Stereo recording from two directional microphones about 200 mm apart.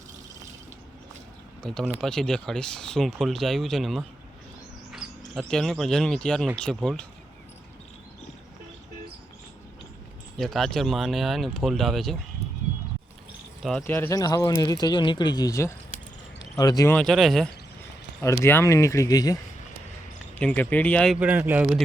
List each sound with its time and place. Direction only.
1.6 s speech: 5° left (ahead or behind)
10.3 s speech: centre (ahead or behind)
13.6 s speech: centre (ahead or behind)
13.8 s speech: 10° left (ahead or behind)
16.9 s speech: centre (ahead or behind)
18.2 s speech: 10° left (ahead or behind)
20.4 s speech: 10° left (ahead or behind); by 21.7 s 10° right (ahead or behind)